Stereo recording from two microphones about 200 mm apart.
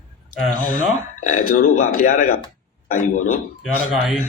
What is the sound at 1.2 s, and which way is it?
Speech, 45° left (ahead or behind).